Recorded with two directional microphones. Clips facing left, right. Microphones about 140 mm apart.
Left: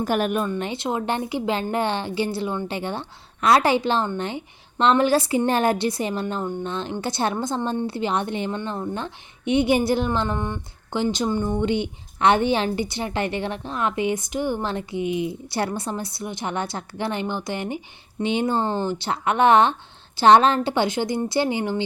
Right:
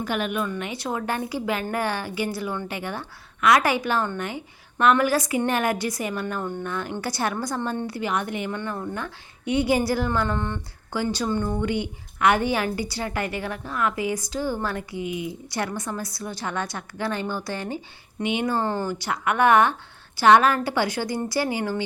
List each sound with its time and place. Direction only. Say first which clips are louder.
0.0 s speech: left 4 dB; 40° left (ahead or behind)
0.5 s a woman's voice: left 3 dB; 25° left (ahead or behind)